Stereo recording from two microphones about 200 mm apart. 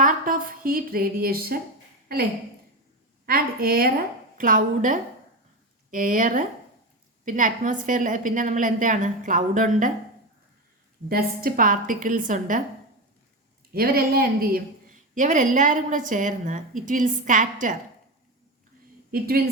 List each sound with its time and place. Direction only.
0.0 s a woman's voice: 45° right (ahead or behind)
3.2 s a woman's voice: 50° right (ahead or behind)
11.1 s a woman's voice: 50° right (ahead or behind)
13.7 s a woman's voice: 50° right (ahead or behind)
19.1 s a woman's voice: 50° right (ahead or behind)